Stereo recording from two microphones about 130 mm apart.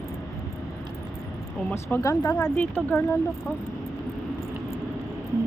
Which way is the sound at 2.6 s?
15° left (ahead or behind).